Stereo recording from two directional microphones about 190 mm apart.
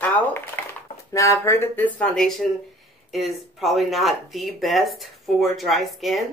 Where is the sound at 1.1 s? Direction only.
15° left (ahead or behind).